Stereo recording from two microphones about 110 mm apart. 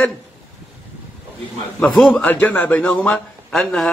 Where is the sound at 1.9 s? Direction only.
5° left (ahead or behind).